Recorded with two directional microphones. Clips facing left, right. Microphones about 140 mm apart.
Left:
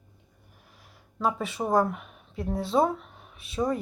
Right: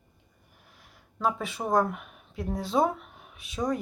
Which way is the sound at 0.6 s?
Centre (ahead or behind).